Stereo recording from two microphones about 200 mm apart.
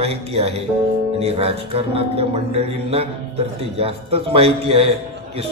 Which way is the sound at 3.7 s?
30° right (ahead or behind).